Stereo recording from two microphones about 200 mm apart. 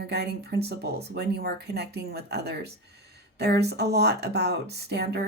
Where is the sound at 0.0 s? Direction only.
55° right (ahead or behind).